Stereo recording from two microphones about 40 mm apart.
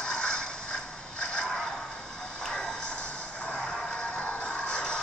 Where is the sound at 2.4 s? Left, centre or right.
Left.